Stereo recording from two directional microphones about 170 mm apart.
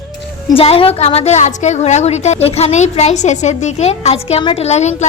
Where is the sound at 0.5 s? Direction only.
35° left (ahead or behind).